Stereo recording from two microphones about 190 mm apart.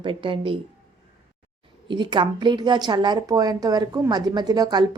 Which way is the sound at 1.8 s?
25° right (ahead or behind).